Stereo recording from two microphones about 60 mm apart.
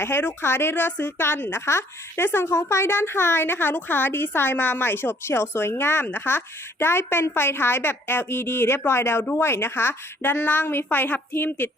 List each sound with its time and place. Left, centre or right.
0.0 s a woman's voice: left